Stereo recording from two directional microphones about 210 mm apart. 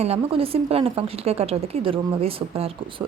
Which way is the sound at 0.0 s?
30° right (ahead or behind).